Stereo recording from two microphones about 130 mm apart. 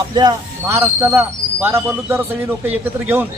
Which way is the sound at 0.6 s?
15° right (ahead or behind).